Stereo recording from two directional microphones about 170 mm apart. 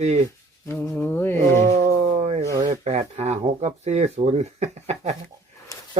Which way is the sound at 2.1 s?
40° right (ahead or behind).